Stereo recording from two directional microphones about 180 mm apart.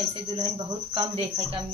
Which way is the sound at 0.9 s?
30° right (ahead or behind).